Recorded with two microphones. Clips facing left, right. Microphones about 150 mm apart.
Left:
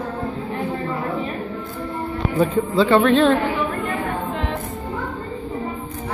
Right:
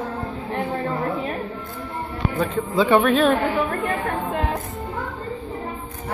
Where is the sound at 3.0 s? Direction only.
Centre (ahead or behind).